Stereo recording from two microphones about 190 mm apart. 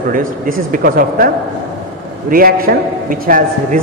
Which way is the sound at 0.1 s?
45° right (ahead or behind).